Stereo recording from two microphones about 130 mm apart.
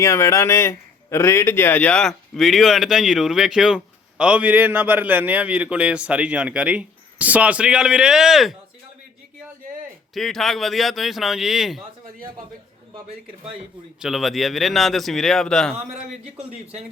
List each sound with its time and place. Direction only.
0.0 s a man's voice: 20° left (ahead or behind); by 8.5 s centre (ahead or behind)
10.2 s a man's voice: centre (ahead or behind)
14.0 s a man's voice: centre (ahead or behind)
15.9 s a man's voice: 65° right (ahead or behind)